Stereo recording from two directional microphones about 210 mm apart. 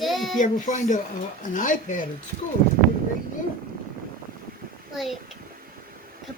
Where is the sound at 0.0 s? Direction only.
Centre (ahead or behind).